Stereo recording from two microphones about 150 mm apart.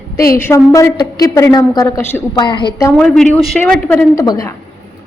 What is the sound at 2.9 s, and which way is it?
Speech, 5° left (ahead or behind).